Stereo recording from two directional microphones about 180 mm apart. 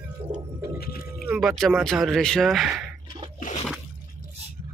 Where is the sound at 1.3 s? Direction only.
Centre (ahead or behind).